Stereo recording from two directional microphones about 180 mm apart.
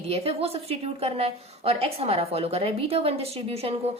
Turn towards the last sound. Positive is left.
turn(degrees=-35)  # may be behind; listen again after turning